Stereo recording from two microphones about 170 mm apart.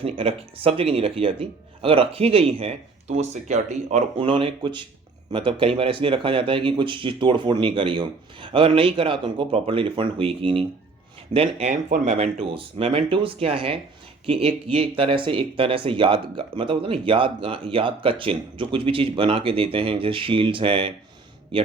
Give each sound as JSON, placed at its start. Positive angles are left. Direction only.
{"t": 0.0, "sound": "speech", "side_deg": -35}